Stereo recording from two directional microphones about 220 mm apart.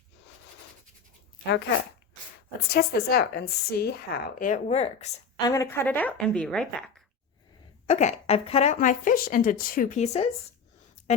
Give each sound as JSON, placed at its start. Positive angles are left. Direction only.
{"t": 2.6, "sound": "a woman's voice", "side_deg": 45}
{"t": 5.5, "sound": "a woman's voice", "side_deg": 10}
{"t": 7.9, "sound": "speech", "side_deg": 30}